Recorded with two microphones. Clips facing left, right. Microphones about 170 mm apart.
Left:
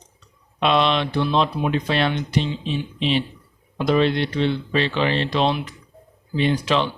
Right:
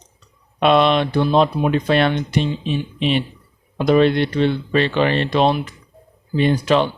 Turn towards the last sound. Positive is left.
turn(degrees=-50)  # may be behind; listen again after turning